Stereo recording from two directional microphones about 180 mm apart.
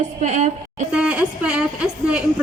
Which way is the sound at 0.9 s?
5° right (ahead or behind).